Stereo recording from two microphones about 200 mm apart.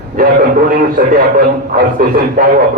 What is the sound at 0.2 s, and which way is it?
A man's voice, 45° right (ahead or behind).